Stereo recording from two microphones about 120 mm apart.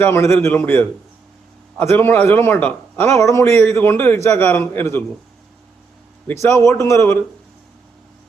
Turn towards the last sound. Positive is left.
turn(degrees=25)  # may be behind; listen again after turning